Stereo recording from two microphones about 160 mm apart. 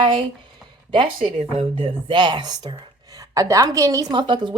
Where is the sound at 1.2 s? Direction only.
40° right (ahead or behind).